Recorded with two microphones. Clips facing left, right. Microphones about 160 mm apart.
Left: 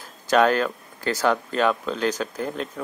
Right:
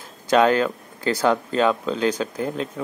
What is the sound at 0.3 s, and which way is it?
Speech, 20° right (ahead or behind).